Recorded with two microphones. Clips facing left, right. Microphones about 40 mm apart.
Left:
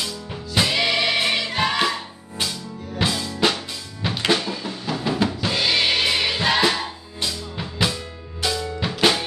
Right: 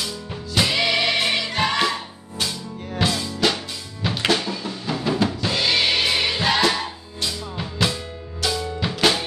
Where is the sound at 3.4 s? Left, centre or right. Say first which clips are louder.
Left 1 dB; left.